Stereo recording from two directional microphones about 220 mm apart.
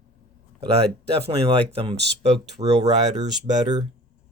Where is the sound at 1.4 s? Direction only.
25° right (ahead or behind).